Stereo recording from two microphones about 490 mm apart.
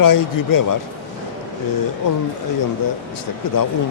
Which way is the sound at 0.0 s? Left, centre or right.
Left.